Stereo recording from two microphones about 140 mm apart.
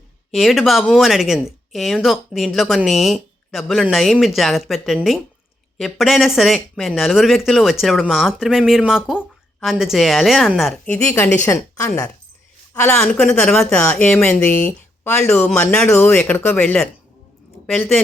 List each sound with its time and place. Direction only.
0.3 s a woman's voice: centre (ahead or behind); by 13.0 s 15° left (ahead or behind)
13.0 s speech: centre (ahead or behind)
15.2 s speech: 5° left (ahead or behind)